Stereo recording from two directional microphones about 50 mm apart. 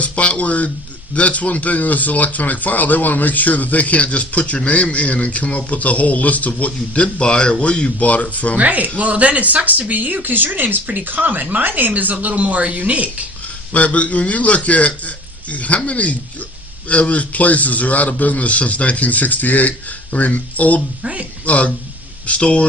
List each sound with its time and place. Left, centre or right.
0.0 s speech: left
8.5 s speech: right
13.7 s a man's voice: left
21.0 s speech: right
21.4 s speech: left